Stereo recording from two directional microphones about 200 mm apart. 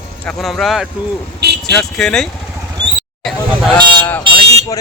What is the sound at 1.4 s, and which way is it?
Vehicle, 55° right (ahead or behind).